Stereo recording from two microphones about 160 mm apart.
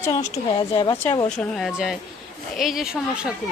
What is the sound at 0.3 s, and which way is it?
Speech, 30° left (ahead or behind).